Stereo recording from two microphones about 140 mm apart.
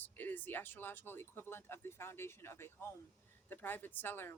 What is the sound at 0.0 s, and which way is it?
Speech, 15° left (ahead or behind).